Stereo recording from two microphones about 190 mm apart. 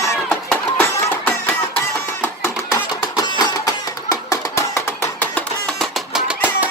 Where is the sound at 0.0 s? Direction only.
15° left (ahead or behind).